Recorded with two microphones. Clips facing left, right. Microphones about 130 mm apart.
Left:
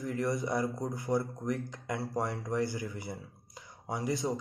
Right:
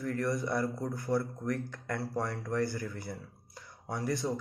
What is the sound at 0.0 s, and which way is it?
Speech, 20° left (ahead or behind).